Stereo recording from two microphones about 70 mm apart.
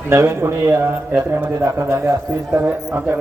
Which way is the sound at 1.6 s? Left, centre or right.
Right.